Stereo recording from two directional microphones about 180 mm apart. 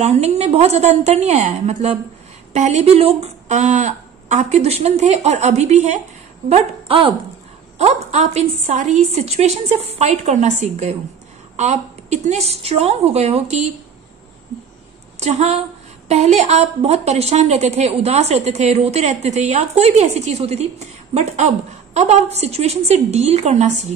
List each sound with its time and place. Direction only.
0.0 s a woman's voice: 35° right (ahead or behind)
15.1 s a woman's voice: 40° right (ahead or behind)